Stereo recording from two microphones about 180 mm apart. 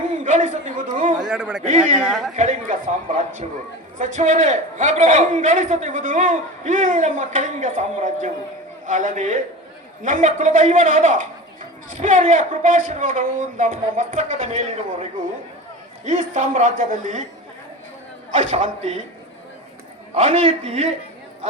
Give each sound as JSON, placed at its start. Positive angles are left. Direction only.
{"t": 0.3, "sound": "a man's voice", "side_deg": -40}
{"t": 1.2, "sound": "a man's voice", "side_deg": -5}
{"t": 1.6, "sound": "a man's voice", "side_deg": -40}
{"t": 2.0, "sound": "a man's voice", "side_deg": 0}
{"t": 2.3, "sound": "a man's voice", "side_deg": -45}
{"t": 16.0, "sound": "a man's voice", "side_deg": -45}
{"t": 18.5, "sound": "a man's voice", "side_deg": -40}
{"t": 20.2, "sound": "a man's voice", "side_deg": -30}